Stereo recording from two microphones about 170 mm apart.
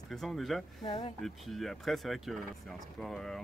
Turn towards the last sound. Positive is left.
turn(degrees=0)  # may be behind; listen again after turning